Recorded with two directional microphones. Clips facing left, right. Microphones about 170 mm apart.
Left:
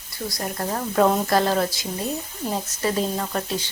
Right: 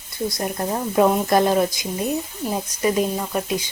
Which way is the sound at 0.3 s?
20° right (ahead or behind).